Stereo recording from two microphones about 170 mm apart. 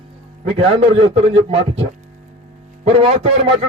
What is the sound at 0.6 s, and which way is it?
A man's voice, 35° right (ahead or behind).